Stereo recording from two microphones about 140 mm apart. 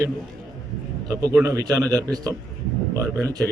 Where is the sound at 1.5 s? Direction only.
25° right (ahead or behind).